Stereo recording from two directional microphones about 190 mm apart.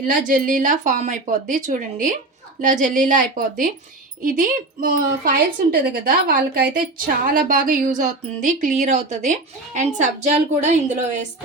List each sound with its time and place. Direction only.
0.0 s speech: 45° right (ahead or behind)